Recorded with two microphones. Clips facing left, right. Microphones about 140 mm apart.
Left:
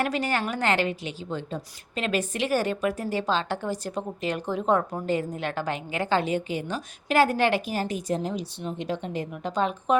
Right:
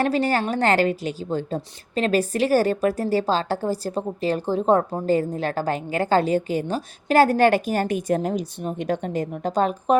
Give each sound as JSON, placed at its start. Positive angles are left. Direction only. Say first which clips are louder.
{"t": 0.0, "sound": "a woman's voice", "louder": "right 5 dB", "side_deg": -35}